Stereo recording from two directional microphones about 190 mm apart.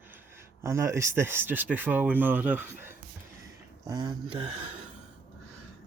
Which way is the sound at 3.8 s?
20° right (ahead or behind).